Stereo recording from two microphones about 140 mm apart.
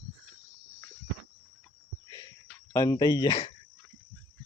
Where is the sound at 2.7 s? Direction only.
25° left (ahead or behind).